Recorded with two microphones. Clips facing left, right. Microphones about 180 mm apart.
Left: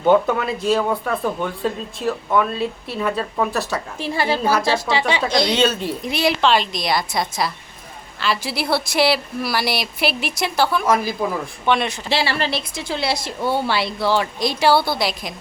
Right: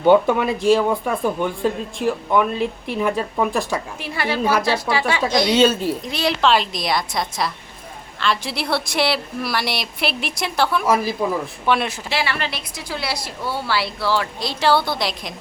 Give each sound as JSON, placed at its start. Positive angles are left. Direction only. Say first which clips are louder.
{"t": 0.1, "sound": "speech", "louder": "right 2 dB", "side_deg": -15}
{"t": 4.0, "sound": "a woman's voice", "louder": "left 3 dB", "side_deg": 30}
{"t": 5.2, "sound": "speech", "louder": "right 5 dB", "side_deg": -10}
{"t": 6.1, "sound": "a woman's voice", "louder": "left 2 dB", "side_deg": 10}
{"t": 12.0, "sound": "a woman's voice", "louder": "left 3 dB", "side_deg": 30}